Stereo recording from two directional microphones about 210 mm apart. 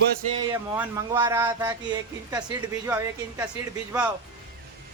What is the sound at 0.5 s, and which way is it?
A man's voice, 10° right (ahead or behind).